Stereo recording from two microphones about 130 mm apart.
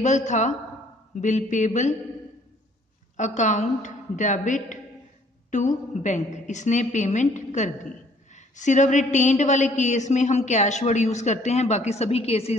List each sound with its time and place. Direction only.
0.0 s a woman's voice: 65° left (ahead or behind)
3.2 s a woman's voice: 70° left (ahead or behind); by 12.5 s 50° left (ahead or behind)